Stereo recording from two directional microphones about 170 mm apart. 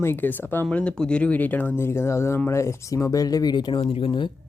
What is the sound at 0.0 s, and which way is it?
Speech, 10° left (ahead or behind).